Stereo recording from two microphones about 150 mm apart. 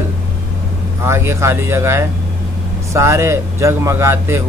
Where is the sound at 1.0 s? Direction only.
20° right (ahead or behind).